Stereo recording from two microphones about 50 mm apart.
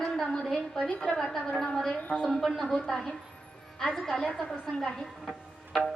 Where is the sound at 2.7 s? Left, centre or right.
Centre.